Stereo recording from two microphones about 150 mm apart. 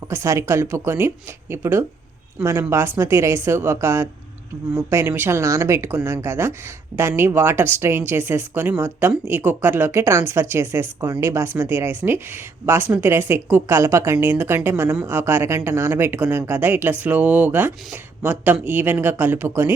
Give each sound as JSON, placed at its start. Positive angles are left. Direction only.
{"t": 0.1, "sound": "speech", "side_deg": -20}